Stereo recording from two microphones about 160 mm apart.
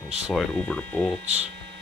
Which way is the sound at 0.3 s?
Centre (ahead or behind).